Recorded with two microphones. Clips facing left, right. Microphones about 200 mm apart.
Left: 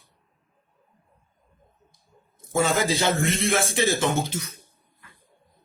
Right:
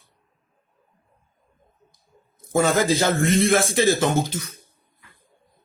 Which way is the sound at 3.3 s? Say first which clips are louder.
Right 6 dB; 50° right (ahead or behind).